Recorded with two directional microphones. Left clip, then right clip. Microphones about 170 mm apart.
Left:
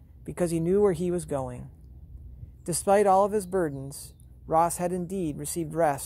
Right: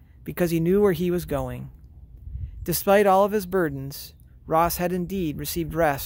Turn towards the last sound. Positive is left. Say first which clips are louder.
# right 3 dB
turn(degrees=-45)  # may be behind; listen again after turning